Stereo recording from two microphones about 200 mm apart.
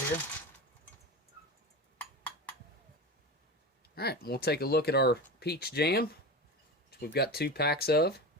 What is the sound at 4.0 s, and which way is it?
Speech, 50° left (ahead or behind).